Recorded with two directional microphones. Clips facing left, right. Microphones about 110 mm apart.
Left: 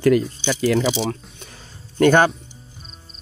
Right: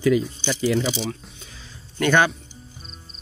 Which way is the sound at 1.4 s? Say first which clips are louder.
Left 3 dB; 60° left (ahead or behind).